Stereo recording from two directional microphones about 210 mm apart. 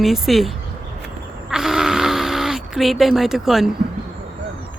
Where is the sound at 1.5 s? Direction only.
Centre (ahead or behind).